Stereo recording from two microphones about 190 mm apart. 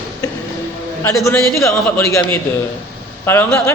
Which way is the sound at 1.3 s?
15° left (ahead or behind).